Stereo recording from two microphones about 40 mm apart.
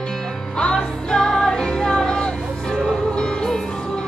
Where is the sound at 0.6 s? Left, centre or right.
Centre.